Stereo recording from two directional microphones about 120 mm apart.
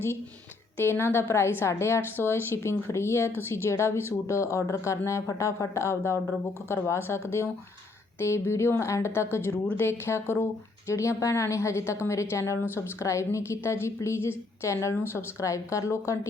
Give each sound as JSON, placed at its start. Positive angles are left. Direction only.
{"t": 0.8, "sound": "a woman's voice", "side_deg": 20}